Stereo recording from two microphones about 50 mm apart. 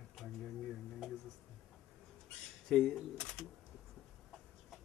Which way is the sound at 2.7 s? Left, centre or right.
Centre.